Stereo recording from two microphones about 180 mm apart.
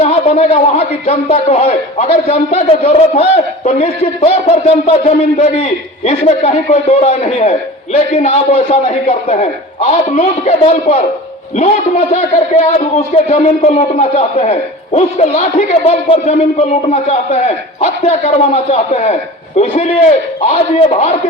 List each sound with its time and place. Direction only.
0.0 s a man's voice: 35° left (ahead or behind)